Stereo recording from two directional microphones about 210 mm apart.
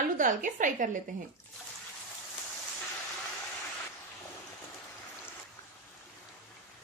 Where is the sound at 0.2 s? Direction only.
40° right (ahead or behind).